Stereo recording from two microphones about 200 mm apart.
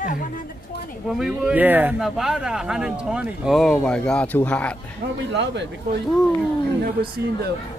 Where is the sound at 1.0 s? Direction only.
Centre (ahead or behind).